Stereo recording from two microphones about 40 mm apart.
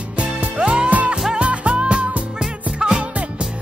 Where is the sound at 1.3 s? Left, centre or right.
Right.